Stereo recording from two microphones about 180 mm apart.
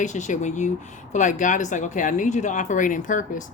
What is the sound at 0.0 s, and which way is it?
Speech, 40° left (ahead or behind).